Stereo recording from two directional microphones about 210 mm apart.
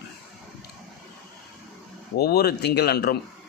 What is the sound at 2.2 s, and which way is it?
Speech, 50° left (ahead or behind).